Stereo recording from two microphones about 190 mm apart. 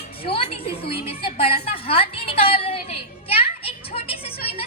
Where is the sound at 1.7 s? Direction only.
30° left (ahead or behind).